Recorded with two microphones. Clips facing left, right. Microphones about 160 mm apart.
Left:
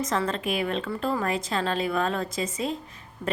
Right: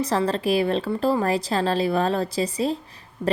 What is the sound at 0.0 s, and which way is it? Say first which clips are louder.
Speech: right 5 dB; 35° right (ahead or behind).